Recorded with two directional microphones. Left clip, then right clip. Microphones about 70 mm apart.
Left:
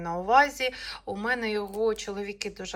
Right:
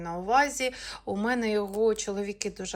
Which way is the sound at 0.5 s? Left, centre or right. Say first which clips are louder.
Left 1 dB; right.